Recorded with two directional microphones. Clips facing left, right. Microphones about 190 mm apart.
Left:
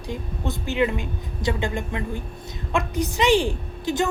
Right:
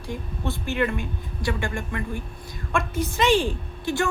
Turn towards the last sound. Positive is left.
turn(degrees=15)  # may be behind; listen again after turning